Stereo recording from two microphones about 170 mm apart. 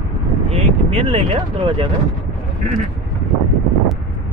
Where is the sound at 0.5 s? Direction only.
35° right (ahead or behind).